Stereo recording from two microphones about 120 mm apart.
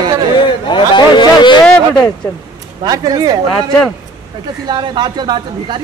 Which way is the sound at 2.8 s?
35° right (ahead or behind).